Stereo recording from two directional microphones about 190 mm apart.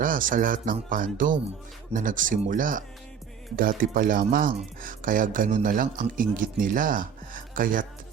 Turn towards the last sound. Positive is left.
turn(degrees=-45)  # may be behind; listen again after turning